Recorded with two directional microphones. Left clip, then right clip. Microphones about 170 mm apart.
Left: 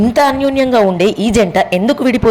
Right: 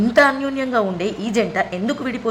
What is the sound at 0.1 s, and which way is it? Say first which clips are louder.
A woman's voice: left 1 dB; 30° left (ahead or behind).